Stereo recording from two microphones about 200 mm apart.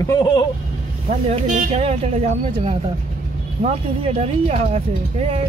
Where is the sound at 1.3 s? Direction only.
35° right (ahead or behind).